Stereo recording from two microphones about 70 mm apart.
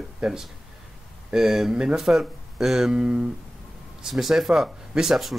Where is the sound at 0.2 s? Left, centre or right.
Centre.